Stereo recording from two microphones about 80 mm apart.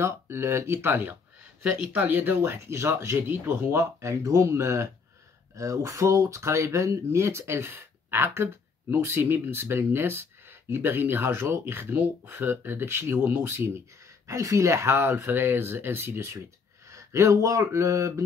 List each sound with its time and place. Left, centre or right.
0.0 s speech: right